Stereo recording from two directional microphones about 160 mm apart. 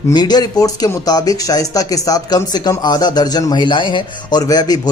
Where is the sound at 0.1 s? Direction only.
25° left (ahead or behind).